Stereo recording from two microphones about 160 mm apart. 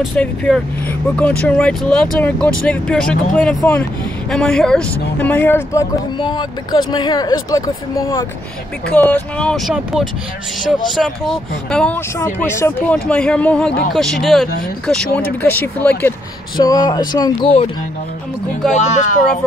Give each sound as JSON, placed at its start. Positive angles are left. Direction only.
{"t": 0.0, "sound": "speech", "side_deg": 5}
{"t": 6.1, "sound": "speech", "side_deg": 30}
{"t": 8.9, "sound": "speech", "side_deg": 10}
{"t": 12.4, "sound": "speech", "side_deg": 20}
{"t": 12.8, "sound": "speech", "side_deg": 5}
{"t": 16.5, "sound": "speech", "side_deg": 25}
{"t": 18.8, "sound": "speech", "side_deg": 45}